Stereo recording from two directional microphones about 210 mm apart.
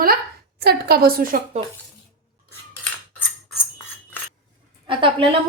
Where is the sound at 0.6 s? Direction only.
50° right (ahead or behind).